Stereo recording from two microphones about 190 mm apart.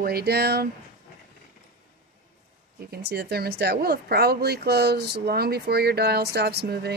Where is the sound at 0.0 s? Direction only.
55° right (ahead or behind).